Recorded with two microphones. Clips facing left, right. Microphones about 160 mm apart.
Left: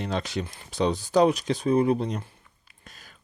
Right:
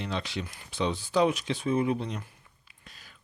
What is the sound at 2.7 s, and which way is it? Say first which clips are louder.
Whispering: left 3 dB; 45° left (ahead or behind).